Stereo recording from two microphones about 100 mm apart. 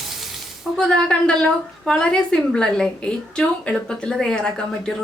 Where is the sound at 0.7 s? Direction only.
10° left (ahead or behind).